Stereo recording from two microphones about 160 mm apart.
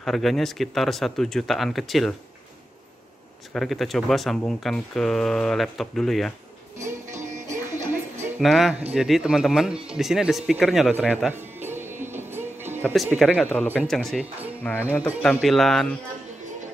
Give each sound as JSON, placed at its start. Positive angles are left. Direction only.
{"t": 0.0, "sound": "speech", "side_deg": 0}
{"t": 3.5, "sound": "speech", "side_deg": 0}
{"t": 7.1, "sound": "music", "side_deg": -50}
{"t": 8.4, "sound": "speech", "side_deg": 0}
{"t": 11.2, "sound": "music", "side_deg": -15}
{"t": 12.8, "sound": "speech", "side_deg": 0}